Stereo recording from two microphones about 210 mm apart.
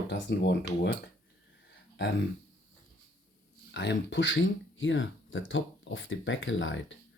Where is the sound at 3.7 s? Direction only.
55° left (ahead or behind).